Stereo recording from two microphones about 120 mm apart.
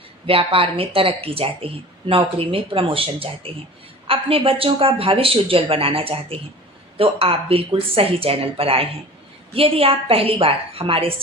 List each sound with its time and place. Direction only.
0.3 s speech: 50° right (ahead or behind)